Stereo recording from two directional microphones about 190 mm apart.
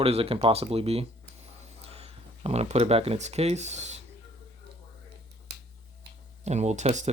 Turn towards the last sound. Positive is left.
turn(degrees=-40)  # may be behind; listen again after turning